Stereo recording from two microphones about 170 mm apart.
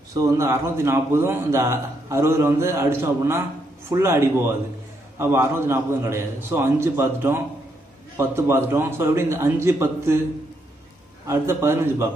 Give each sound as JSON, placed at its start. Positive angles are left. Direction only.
{"t": 0.1, "sound": "a man's voice", "side_deg": -20}
{"t": 11.2, "sound": "a man's voice", "side_deg": -15}